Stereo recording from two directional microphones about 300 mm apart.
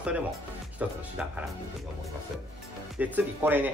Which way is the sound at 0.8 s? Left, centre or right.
Centre.